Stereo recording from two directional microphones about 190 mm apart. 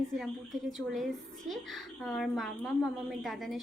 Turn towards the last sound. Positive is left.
turn(degrees=0)  # may be behind; listen again after turning